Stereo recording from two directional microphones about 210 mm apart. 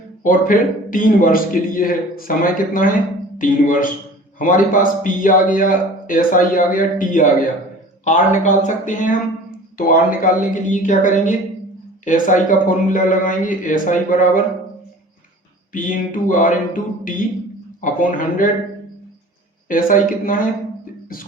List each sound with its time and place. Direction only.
0.2 s a man's voice: 40° left (ahead or behind)
15.7 s a man's voice: 40° left (ahead or behind)
19.6 s a man's voice: 40° left (ahead or behind)